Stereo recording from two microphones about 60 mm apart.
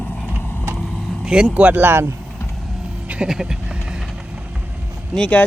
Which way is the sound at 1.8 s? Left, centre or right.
Right.